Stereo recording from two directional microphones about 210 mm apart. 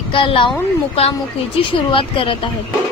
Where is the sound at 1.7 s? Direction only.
25° left (ahead or behind).